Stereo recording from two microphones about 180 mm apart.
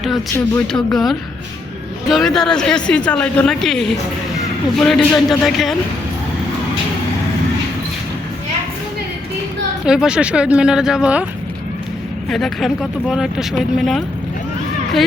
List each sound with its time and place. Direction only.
0.3 s speech: 5° left (ahead or behind)
9.8 s speech: 5° right (ahead or behind)
12.3 s speech: centre (ahead or behind)